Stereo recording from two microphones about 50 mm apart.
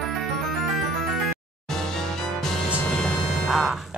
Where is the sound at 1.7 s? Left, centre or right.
Centre.